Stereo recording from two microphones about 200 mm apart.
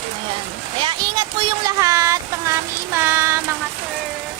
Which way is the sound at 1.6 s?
15° right (ahead or behind).